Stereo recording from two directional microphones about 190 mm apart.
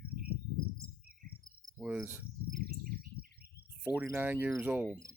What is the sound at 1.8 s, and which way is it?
Speech, 5° right (ahead or behind).